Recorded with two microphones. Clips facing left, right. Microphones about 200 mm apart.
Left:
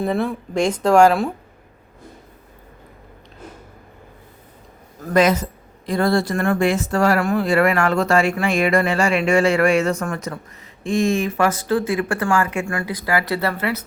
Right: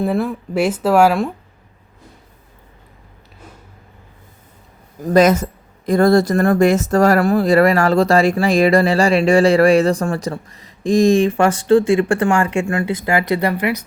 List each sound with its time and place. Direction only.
0.0 s speech: centre (ahead or behind)
5.1 s speech: 45° right (ahead or behind); by 13.8 s 15° right (ahead or behind)